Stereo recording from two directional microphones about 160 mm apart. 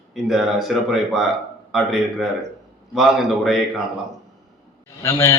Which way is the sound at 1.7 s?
Centre (ahead or behind).